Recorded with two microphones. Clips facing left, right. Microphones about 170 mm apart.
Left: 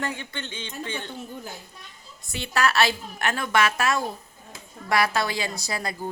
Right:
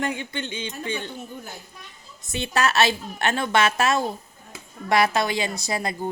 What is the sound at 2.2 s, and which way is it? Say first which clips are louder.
A woman's voice: right 1 dB; 20° right (ahead or behind).